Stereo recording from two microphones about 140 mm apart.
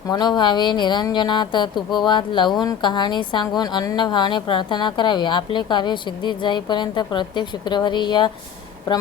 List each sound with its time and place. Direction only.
0.1 s a woman's voice: 30° left (ahead or behind)